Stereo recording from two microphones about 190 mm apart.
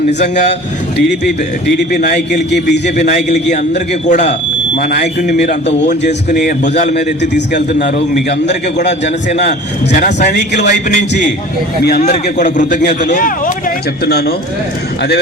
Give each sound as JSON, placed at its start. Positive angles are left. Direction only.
{"t": 1.9, "sound": "a man's voice", "side_deg": 55}
{"t": 3.0, "sound": "a man's voice", "side_deg": 40}
{"t": 6.9, "sound": "a man's voice", "side_deg": 65}
{"t": 9.9, "sound": "a man's voice", "side_deg": 40}
{"t": 10.3, "sound": "a man's voice", "side_deg": 65}
{"t": 11.8, "sound": "a man's voice", "side_deg": 55}
{"t": 12.0, "sound": "a man's voice", "side_deg": 40}
{"t": 14.0, "sound": "a man's voice", "side_deg": 60}